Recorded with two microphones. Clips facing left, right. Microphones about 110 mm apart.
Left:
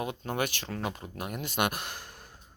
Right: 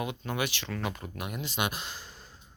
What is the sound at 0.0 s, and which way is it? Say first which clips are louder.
Speech: left 1 dB; 40° left (ahead or behind).